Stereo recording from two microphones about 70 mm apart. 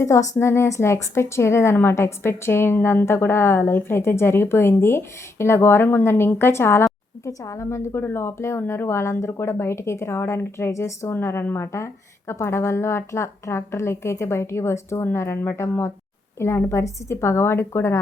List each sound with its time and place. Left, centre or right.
0.0 s a woman's voice: left
6.8 s a woman's voice: left